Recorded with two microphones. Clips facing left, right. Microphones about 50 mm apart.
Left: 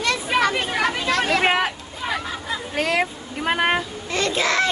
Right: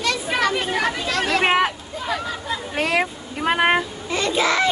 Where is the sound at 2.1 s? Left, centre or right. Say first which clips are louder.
Right 1 dB; centre.